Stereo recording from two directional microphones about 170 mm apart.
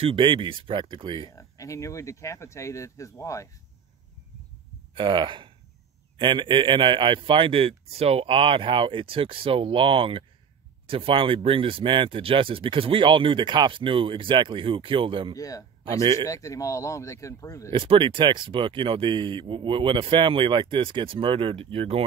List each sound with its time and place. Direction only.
0.0 s speech: 30° right (ahead or behind)
1.3 s speech: 20° left (ahead or behind)
4.9 s speech: 30° right (ahead or behind)
15.3 s speech: 20° left (ahead or behind)
15.8 s a man's voice: 30° right (ahead or behind)
16.3 s speech: 20° left (ahead or behind)
17.7 s speech: 30° right (ahead or behind)